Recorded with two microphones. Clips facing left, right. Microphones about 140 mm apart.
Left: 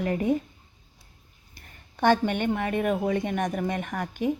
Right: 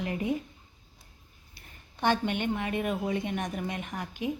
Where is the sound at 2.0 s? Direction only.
50° left (ahead or behind).